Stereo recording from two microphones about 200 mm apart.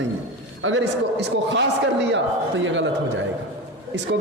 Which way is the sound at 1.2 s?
60° right (ahead or behind).